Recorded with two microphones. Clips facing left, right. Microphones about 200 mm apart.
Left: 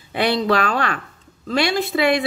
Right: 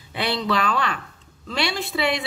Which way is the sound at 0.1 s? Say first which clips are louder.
Left 5 dB; 50° left (ahead or behind).